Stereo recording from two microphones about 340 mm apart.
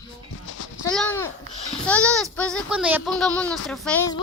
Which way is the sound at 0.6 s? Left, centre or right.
Left.